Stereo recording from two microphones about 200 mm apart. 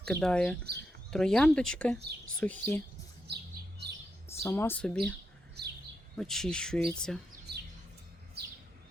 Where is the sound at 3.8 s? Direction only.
55° right (ahead or behind).